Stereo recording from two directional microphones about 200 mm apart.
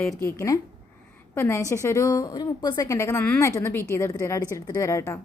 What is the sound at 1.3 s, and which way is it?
A woman's voice, 15° left (ahead or behind).